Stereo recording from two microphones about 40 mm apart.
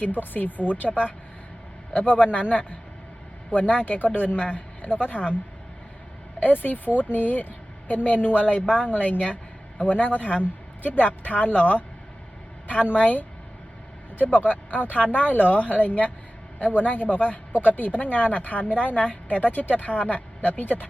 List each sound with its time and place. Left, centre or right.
0.0 s speech: left
1.9 s speech: left
6.4 s a woman's voice: left
13.0 s speech: left